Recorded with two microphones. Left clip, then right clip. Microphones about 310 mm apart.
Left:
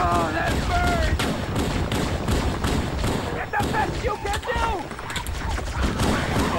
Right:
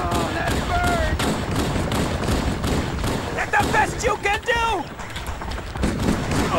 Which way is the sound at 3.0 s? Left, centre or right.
Centre.